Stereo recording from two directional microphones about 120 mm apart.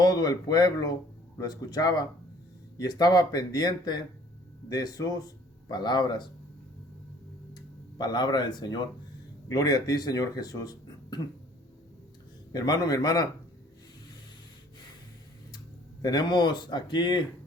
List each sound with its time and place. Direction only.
0.0 s speech: 35° left (ahead or behind)
7.5 s speech: 35° left (ahead or behind)
12.5 s speech: 35° left (ahead or behind)
15.5 s speech: 30° left (ahead or behind)